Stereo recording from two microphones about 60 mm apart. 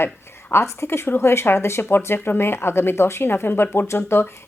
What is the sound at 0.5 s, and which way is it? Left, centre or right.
Speech, left.